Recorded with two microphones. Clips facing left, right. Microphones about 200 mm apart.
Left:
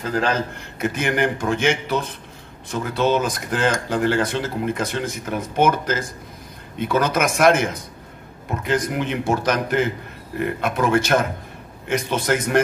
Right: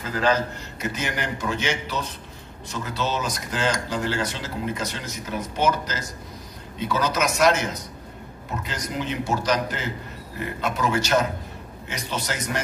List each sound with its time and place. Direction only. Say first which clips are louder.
0.1 s speech: even; 50° left (ahead or behind)